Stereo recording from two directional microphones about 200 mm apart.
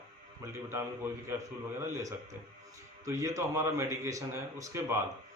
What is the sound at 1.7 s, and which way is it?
A man's voice, 15° right (ahead or behind).